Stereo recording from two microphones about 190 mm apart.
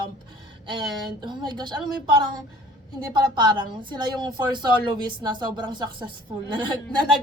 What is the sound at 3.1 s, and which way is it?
A woman's voice, 25° right (ahead or behind).